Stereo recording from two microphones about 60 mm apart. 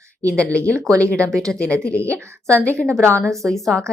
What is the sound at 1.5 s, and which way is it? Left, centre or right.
Speech, centre.